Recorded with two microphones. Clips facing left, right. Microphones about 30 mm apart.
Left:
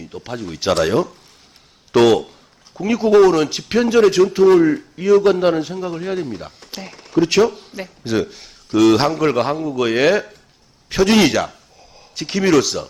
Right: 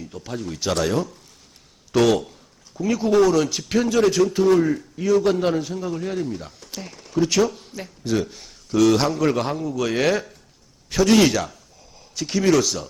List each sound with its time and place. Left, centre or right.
0.1 s a man's voice: left
2.0 s a man's voice: centre
12.5 s speech: centre